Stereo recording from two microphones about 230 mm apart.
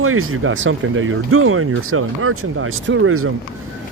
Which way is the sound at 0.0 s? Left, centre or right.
Right.